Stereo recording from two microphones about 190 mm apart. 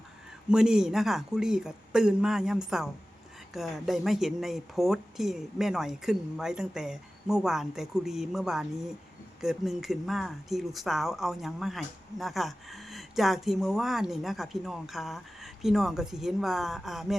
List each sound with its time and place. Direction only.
0.5 s speech: 5° right (ahead or behind)